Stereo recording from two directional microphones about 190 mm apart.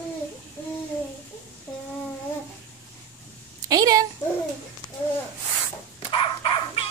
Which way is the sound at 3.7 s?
20° right (ahead or behind).